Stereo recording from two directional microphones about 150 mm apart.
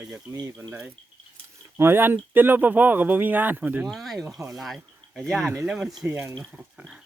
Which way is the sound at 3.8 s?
Centre (ahead or behind).